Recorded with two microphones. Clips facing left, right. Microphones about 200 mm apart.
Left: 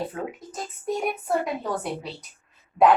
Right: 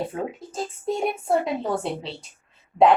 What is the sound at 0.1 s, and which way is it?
A woman's voice, 30° right (ahead or behind).